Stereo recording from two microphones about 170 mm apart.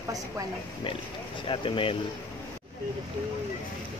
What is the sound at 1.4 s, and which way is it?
Speech, 30° left (ahead or behind).